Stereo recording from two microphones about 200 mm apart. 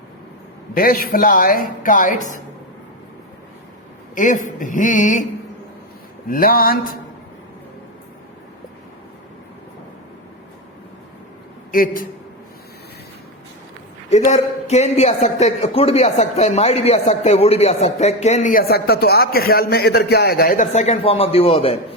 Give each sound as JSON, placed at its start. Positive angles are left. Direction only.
{"t": 0.7, "sound": "speech", "side_deg": 45}
{"t": 4.1, "sound": "a man's voice", "side_deg": 40}
{"t": 6.2, "sound": "speech", "side_deg": 45}
{"t": 11.7, "sound": "speech", "side_deg": 45}
{"t": 14.3, "sound": "a man's voice", "side_deg": 35}